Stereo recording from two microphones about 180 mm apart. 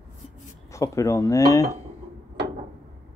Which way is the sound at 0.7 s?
15° left (ahead or behind).